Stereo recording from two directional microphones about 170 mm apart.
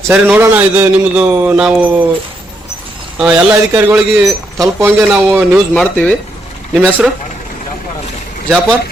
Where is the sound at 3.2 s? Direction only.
10° right (ahead or behind).